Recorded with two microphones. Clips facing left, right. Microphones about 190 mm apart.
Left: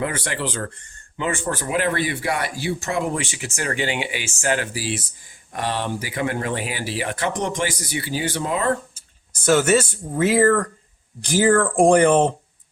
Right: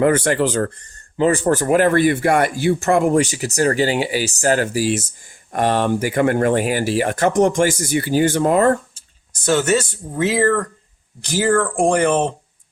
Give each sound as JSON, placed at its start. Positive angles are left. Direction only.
{"t": 0.0, "sound": "speech", "side_deg": -50}
{"t": 9.5, "sound": "speech", "side_deg": 10}
{"t": 11.6, "sound": "speech", "side_deg": 15}